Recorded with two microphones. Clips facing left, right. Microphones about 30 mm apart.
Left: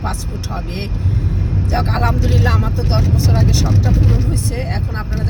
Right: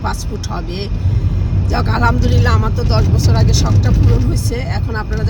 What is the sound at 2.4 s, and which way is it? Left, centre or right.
Speech, right.